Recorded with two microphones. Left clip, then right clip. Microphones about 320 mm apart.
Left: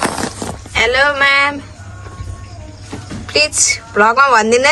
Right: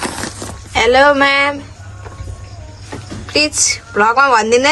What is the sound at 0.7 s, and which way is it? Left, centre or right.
Speech, centre.